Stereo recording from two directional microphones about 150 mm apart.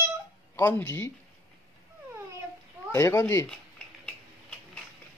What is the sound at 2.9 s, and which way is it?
Speech, 20° left (ahead or behind).